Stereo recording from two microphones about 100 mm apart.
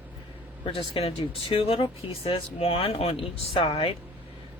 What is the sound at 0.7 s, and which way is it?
A woman's voice, 70° left (ahead or behind).